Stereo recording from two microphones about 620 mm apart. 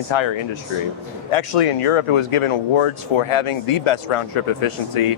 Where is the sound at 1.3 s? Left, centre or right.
Left.